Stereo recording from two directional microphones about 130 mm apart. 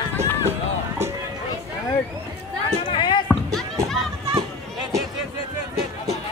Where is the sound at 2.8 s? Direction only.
40° left (ahead or behind).